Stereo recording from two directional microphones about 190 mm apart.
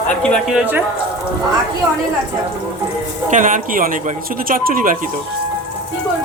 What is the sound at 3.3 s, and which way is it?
Speech, 45° right (ahead or behind).